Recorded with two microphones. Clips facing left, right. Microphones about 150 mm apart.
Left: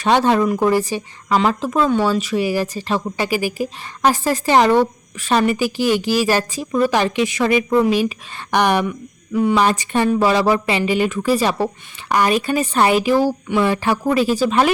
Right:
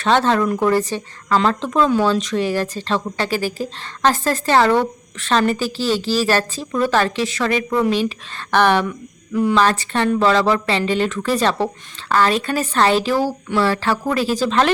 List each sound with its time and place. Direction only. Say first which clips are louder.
0.0 s speech: left 1 dB; 10° left (ahead or behind)
9.6 s speech: left 1 dB; 15° left (ahead or behind)